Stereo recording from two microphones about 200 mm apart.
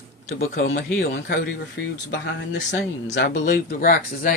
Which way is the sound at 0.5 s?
60° left (ahead or behind).